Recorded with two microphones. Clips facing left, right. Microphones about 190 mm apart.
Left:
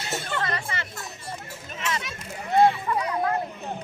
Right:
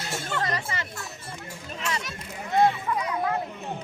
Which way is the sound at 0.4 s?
35° right (ahead or behind).